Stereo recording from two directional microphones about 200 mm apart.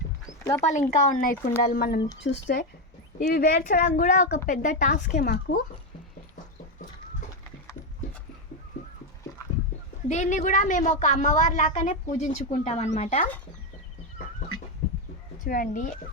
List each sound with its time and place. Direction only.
0.6 s a woman's voice: 35° left (ahead or behind); by 5.6 s 50° left (ahead or behind)
10.1 s a woman's voice: 35° left (ahead or behind)
15.4 s speech: 45° left (ahead or behind)